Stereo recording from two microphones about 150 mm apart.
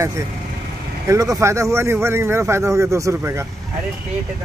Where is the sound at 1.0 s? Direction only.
20° right (ahead or behind).